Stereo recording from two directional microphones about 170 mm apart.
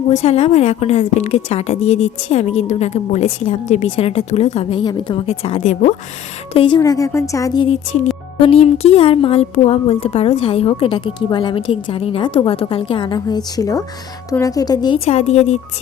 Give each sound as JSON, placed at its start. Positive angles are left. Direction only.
{"t": 0.1, "sound": "a woman's voice", "side_deg": 40}
{"t": 8.4, "sound": "a woman's voice", "side_deg": 35}
{"t": 15.0, "sound": "a woman's voice", "side_deg": 40}